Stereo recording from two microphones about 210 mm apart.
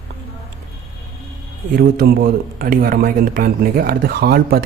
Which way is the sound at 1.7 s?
40° right (ahead or behind).